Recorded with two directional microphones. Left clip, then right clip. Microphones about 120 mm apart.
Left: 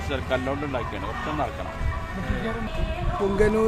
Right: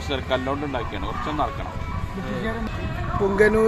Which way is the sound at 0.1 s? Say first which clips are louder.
Right 2 dB; 35° right (ahead or behind).